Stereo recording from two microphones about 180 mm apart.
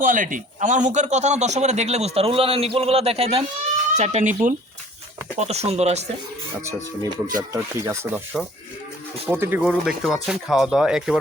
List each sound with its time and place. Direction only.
0.0 s a man's voice: 45° right (ahead or behind)
6.7 s speech: 20° right (ahead or behind); by 11.2 s 5° right (ahead or behind)